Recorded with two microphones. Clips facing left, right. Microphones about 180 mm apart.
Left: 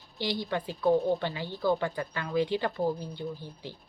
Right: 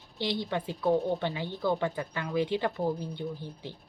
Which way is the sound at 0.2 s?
25° right (ahead or behind).